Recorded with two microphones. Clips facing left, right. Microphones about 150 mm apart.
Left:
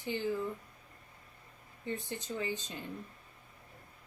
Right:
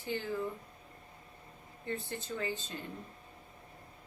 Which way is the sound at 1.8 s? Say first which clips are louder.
Even; 15° left (ahead or behind).